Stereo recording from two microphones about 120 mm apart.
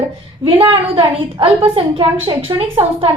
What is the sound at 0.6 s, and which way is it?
A woman's voice, 45° right (ahead or behind).